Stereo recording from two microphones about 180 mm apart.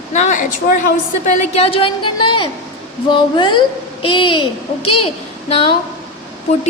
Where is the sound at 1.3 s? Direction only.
35° left (ahead or behind).